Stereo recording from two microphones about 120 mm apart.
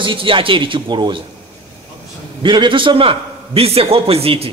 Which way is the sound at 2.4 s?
40° right (ahead or behind).